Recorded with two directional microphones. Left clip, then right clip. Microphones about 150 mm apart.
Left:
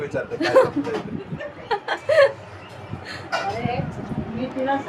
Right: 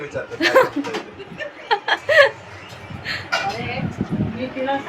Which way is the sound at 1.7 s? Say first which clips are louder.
Right 4 dB; 5° right (ahead or behind).